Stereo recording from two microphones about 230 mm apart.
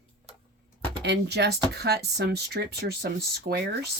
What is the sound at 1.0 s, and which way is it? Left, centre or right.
Speech, right.